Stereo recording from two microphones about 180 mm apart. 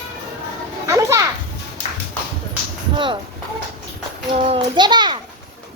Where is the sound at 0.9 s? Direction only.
15° right (ahead or behind).